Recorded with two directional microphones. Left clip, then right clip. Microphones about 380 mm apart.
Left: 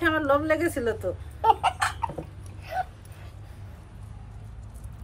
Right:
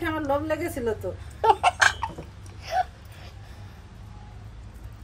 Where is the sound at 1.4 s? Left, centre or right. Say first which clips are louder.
Right 2 dB; right.